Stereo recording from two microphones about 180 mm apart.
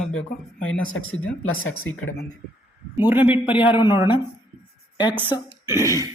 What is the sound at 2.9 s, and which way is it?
Speech, 10° right (ahead or behind).